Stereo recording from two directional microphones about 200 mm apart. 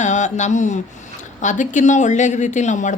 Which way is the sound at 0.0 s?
35° left (ahead or behind).